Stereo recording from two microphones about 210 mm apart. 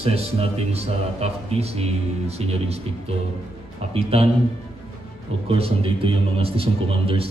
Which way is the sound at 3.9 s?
30° right (ahead or behind).